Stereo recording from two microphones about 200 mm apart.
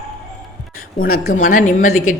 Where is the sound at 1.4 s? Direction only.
40° left (ahead or behind).